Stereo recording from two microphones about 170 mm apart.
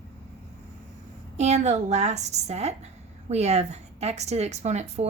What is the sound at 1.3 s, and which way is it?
A woman's voice, 40° right (ahead or behind).